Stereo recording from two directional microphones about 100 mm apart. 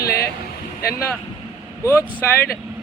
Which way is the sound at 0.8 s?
30° left (ahead or behind).